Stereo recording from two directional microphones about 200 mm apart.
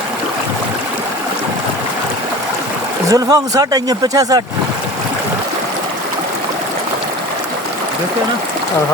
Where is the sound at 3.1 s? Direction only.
20° right (ahead or behind).